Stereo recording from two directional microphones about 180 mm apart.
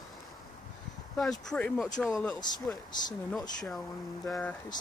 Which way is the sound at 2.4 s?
25° left (ahead or behind).